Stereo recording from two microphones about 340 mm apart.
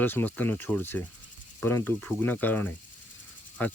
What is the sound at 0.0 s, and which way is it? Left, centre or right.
Speech, centre.